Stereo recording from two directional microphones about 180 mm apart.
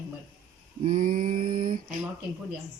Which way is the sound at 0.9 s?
45° right (ahead or behind).